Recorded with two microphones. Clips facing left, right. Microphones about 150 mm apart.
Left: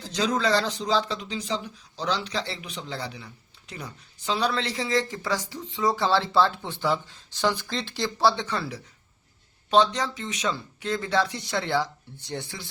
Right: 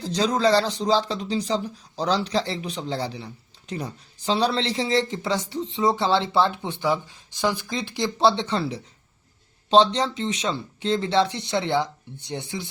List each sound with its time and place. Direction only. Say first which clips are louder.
0.0 s speech: right 4 dB; 35° right (ahead or behind); by 12.7 s 20° right (ahead or behind)